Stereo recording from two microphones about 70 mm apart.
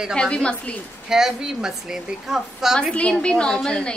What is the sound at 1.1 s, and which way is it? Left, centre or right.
A woman's voice, centre.